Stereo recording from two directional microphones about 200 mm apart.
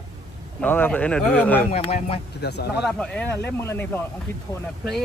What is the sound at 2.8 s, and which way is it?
Speech, 5° left (ahead or behind).